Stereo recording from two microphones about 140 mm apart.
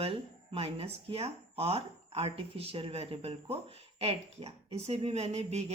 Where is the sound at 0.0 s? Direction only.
40° right (ahead or behind).